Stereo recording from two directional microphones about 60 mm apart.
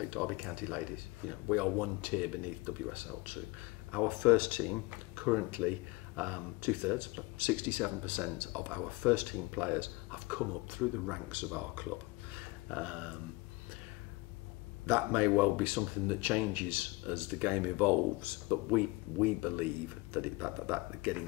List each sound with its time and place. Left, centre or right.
0.1 s speech: right
12.4 s a sound: right
14.9 s speech: right